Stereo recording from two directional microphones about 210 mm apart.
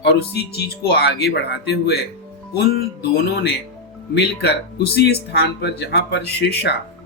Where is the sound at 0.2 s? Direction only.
50° left (ahead or behind).